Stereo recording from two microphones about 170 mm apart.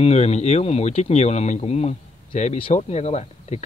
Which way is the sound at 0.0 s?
40° left (ahead or behind).